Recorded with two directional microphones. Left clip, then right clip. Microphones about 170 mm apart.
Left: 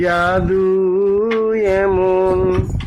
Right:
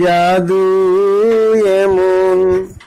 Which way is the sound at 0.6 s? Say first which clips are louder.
Right 4 dB; 5° right (ahead or behind).